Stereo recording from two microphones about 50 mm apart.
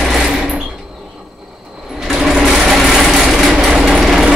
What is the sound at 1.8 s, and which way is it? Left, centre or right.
Sewing machine, centre.